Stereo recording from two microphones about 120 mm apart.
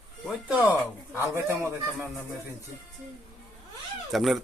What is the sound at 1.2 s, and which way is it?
Speech, 20° right (ahead or behind).